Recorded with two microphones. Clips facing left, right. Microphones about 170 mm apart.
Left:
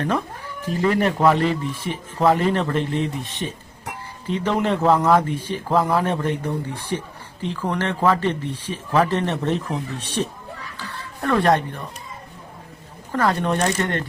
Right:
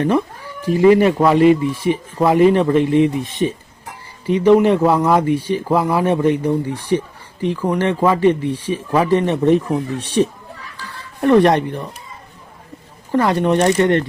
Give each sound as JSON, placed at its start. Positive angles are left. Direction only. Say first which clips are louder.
{"t": 0.6, "sound": "speech", "louder": "right 9 dB", "side_deg": -15}
{"t": 7.5, "sound": "speech", "louder": "right 6 dB", "side_deg": -10}
{"t": 13.1, "sound": "speech", "louder": "right 6 dB", "side_deg": -15}